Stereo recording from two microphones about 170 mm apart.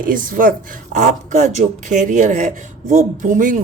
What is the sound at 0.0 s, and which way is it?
Speech, 55° right (ahead or behind).